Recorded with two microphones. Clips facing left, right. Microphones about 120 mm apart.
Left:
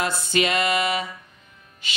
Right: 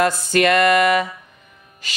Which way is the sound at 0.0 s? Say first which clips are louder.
Right 6 dB; 55° right (ahead or behind).